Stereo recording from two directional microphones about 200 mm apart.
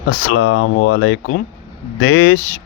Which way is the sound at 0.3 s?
90° left.